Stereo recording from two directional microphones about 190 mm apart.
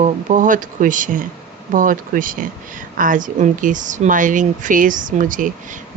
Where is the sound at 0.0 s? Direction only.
40° right (ahead or behind).